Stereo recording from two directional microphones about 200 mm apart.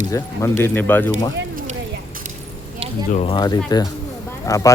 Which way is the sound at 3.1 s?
25° left (ahead or behind).